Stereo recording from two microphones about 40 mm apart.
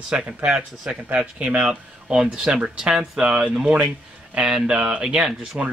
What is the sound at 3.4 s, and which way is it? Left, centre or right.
Speech, right.